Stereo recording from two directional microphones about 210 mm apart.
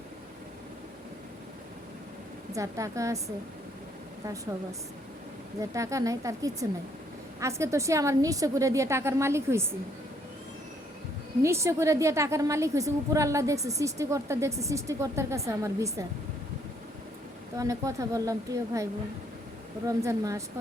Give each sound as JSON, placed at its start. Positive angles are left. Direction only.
{"t": 2.5, "sound": "a woman's voice", "side_deg": -15}
{"t": 5.7, "sound": "a woman's voice", "side_deg": -15}
{"t": 11.4, "sound": "a woman's voice", "side_deg": -15}
{"t": 17.6, "sound": "a woman's voice", "side_deg": -15}